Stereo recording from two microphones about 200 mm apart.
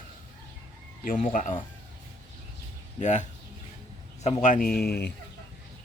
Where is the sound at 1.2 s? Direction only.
40° left (ahead or behind).